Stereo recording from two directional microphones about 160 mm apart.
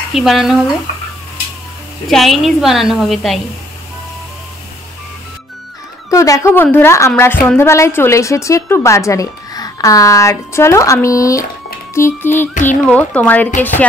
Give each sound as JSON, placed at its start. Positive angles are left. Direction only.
{"t": 0.1, "sound": "a woman's voice", "side_deg": 0}
{"t": 2.0, "sound": "a woman's voice", "side_deg": 0}
{"t": 6.0, "sound": "a woman's voice", "side_deg": 20}